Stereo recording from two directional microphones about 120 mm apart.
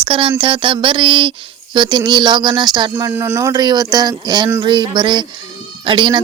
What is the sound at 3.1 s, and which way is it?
Speech, 20° right (ahead or behind).